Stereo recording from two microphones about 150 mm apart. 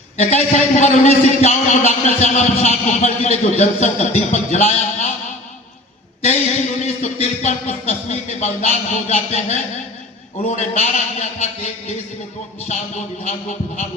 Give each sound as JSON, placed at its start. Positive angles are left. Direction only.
{"t": 0.2, "sound": "a man's voice", "side_deg": 50}
{"t": 6.8, "sound": "a man's voice", "side_deg": 45}